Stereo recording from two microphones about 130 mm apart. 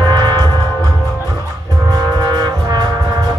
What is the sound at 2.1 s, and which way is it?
Music, 30° right (ahead or behind).